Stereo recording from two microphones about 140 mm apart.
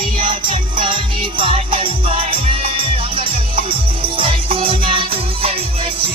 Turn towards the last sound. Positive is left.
turn(degrees=-40)  # may be behind; listen again after turning